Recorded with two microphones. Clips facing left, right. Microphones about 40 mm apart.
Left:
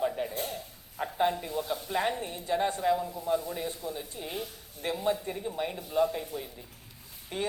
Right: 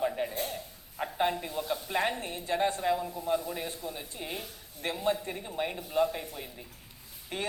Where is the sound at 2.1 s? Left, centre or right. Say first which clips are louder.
Left 1 dB; right.